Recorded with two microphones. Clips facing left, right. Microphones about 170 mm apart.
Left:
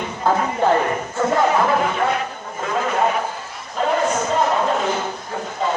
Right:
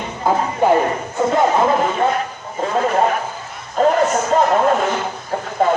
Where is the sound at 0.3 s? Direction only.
15° right (ahead or behind).